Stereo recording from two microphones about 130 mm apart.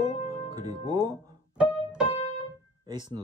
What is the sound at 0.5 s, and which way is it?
Speech, 30° right (ahead or behind).